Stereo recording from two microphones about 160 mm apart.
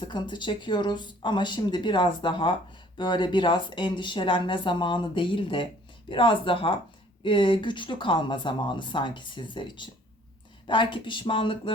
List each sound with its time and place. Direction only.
0.0 s speech: 30° left (ahead or behind)